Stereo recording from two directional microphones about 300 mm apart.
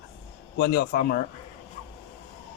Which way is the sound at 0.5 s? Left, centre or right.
Left.